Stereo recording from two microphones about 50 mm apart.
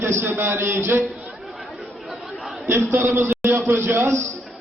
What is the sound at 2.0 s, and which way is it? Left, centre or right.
Chatter, centre.